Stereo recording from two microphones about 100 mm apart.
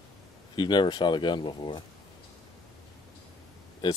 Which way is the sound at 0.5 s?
50° left (ahead or behind).